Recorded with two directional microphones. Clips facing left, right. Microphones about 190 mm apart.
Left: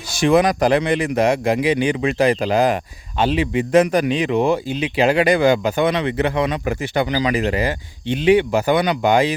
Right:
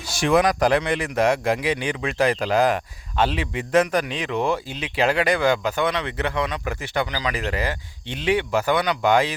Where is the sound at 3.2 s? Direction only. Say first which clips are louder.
Left 5 dB; 10° left (ahead or behind).